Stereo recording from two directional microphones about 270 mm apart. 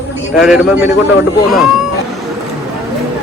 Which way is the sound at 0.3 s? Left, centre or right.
Centre.